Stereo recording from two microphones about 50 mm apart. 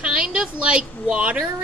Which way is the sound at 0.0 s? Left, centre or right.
Right.